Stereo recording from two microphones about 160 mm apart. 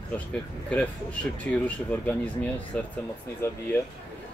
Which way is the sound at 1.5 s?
10° left (ahead or behind).